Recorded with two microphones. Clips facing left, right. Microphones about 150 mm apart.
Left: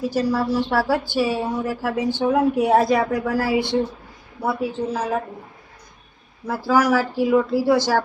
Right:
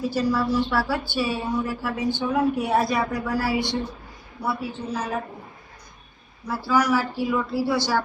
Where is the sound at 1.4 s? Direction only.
45° left (ahead or behind).